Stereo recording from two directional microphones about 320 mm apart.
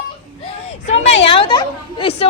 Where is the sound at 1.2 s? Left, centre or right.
Centre.